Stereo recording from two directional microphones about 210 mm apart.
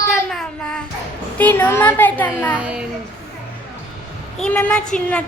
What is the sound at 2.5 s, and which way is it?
Speech, 5° right (ahead or behind).